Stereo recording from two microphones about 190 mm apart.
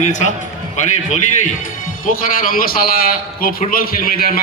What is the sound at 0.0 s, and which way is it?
Speech, 40° left (ahead or behind).